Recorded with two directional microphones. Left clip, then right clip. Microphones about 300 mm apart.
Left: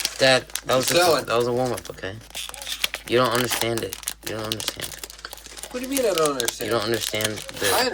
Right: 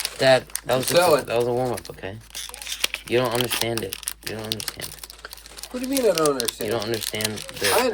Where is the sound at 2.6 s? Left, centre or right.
Centre.